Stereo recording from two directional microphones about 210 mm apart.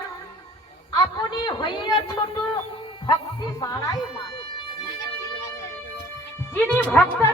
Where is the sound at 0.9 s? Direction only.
20° left (ahead or behind).